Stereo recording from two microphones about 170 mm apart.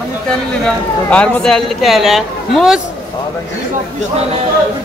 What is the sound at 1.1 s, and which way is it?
A man's voice, 5° left (ahead or behind).